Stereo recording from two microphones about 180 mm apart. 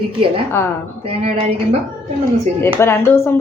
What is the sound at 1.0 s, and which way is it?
Speech, 35° right (ahead or behind).